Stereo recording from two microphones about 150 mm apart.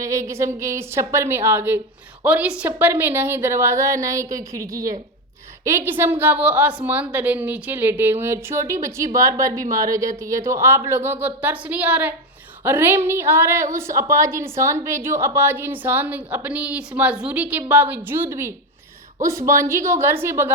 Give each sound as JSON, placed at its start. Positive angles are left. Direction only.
{"t": 0.0, "sound": "a woman's voice", "side_deg": -20}